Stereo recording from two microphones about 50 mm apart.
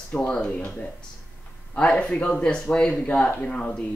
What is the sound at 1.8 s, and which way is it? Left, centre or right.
Speech, left.